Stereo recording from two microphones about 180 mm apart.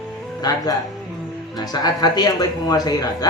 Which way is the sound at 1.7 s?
20° left (ahead or behind).